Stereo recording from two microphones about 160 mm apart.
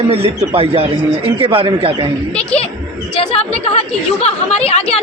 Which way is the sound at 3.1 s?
35° left (ahead or behind).